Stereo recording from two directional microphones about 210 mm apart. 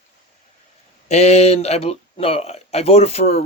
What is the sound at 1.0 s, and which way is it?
Speech, 30° left (ahead or behind).